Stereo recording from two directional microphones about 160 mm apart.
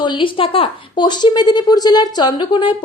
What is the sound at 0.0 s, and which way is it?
A woman's voice, 30° left (ahead or behind).